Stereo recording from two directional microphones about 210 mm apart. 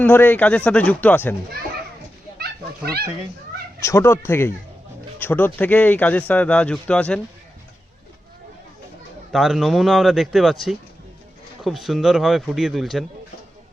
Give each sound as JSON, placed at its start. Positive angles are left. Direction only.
{"t": 0.0, "sound": "speech", "side_deg": 10}
{"t": 2.4, "sound": "speech", "side_deg": -50}
{"t": 3.8, "sound": "speech", "side_deg": 15}
{"t": 9.3, "sound": "speech", "side_deg": 0}